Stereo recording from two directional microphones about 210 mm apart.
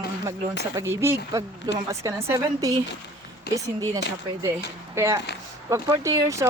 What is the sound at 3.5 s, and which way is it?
Speech, 50° left (ahead or behind).